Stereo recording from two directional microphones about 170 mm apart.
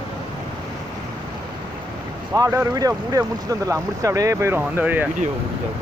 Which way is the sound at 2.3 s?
20° right (ahead or behind).